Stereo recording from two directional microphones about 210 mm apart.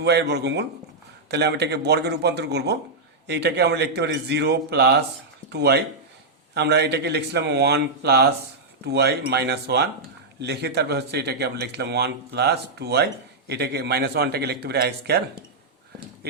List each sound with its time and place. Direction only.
0.0 s speech: 55° right (ahead or behind)